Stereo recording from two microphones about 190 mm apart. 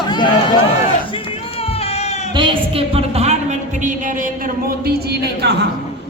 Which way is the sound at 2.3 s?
25° right (ahead or behind).